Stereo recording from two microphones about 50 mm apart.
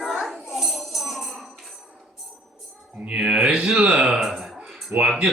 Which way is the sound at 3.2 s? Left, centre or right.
Centre.